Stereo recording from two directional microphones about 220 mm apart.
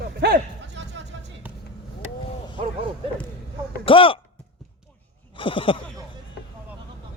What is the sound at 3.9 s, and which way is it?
Speech, 25° left (ahead or behind).